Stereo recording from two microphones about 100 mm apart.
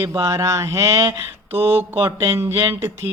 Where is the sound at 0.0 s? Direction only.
30° right (ahead or behind).